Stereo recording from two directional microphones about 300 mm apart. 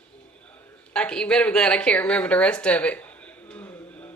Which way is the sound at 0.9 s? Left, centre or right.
Centre.